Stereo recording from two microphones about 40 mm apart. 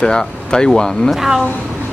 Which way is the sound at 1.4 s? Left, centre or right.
Left.